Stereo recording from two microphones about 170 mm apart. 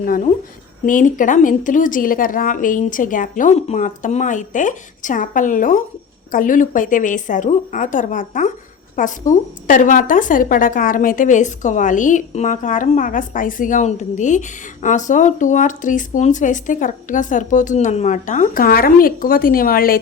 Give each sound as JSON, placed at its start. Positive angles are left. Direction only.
{"t": 0.9, "sound": "a woman's voice", "side_deg": 50}